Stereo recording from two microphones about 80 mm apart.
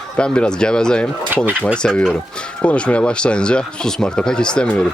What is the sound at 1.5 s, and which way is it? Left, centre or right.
Speech, centre.